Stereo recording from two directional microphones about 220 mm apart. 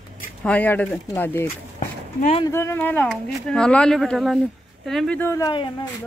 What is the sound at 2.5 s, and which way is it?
Speech, 10° left (ahead or behind).